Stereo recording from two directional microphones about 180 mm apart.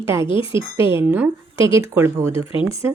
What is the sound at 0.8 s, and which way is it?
A woman's voice, 15° right (ahead or behind).